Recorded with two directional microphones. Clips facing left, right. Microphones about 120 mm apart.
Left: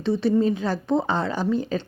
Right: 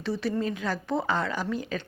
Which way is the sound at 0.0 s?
25° left (ahead or behind).